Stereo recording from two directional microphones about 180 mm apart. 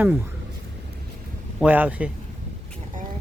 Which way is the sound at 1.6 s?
10° right (ahead or behind).